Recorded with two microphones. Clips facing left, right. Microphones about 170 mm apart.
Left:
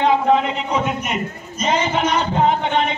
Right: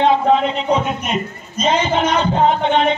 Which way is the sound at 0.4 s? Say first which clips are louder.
Right 3 dB; 20° right (ahead or behind).